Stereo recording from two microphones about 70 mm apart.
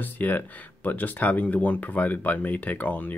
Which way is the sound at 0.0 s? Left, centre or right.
Left.